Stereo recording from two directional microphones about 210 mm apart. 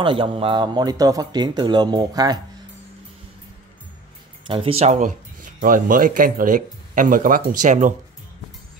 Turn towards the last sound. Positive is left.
turn(degrees=-35)  # may be behind; listen again after turning